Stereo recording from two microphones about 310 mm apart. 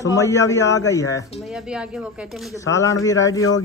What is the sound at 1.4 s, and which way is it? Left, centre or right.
Speech, centre.